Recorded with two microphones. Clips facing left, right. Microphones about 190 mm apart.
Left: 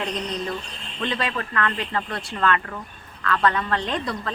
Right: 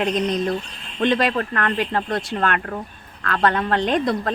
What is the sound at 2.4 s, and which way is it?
A woman's voice, 55° right (ahead or behind).